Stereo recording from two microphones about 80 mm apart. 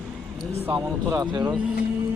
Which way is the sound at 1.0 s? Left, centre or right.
Right.